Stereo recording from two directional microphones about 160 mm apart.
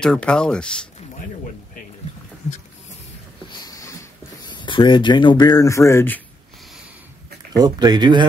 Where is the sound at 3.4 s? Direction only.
25° left (ahead or behind).